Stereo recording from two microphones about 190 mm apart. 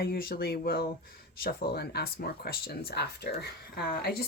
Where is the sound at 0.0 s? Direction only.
50° left (ahead or behind).